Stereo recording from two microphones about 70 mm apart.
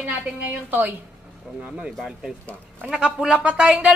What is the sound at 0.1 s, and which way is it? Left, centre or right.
Speech, centre.